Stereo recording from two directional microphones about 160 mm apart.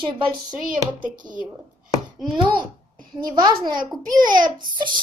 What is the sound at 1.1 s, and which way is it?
Speech, 55° right (ahead or behind).